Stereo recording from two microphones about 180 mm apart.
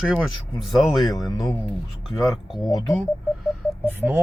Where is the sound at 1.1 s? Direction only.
20° left (ahead or behind).